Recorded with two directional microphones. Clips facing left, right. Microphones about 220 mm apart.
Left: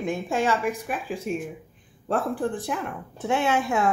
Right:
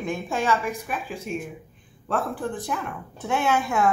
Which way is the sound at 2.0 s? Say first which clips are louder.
Left 2 dB; 30° left (ahead or behind).